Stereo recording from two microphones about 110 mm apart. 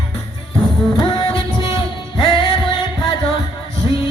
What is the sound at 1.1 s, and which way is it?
Music, 55° left (ahead or behind).